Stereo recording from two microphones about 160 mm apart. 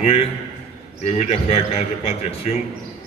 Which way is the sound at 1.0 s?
40° left (ahead or behind).